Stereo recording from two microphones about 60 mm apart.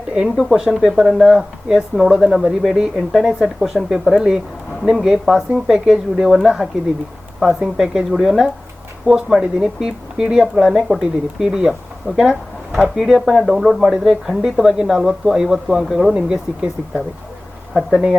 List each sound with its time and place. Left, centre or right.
0.1 s speech: centre
0.7 s speech: centre
16.1 s speech: centre